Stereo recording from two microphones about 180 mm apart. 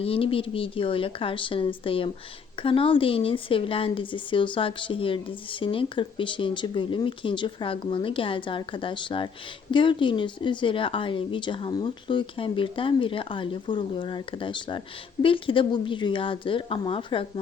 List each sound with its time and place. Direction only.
0.0 s speech: 30° left (ahead or behind)